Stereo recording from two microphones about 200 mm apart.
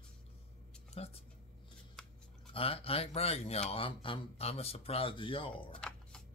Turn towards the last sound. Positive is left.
turn(degrees=5)  # may be behind; listen again after turning